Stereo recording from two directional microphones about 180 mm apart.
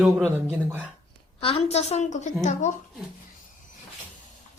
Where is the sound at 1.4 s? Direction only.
30° left (ahead or behind).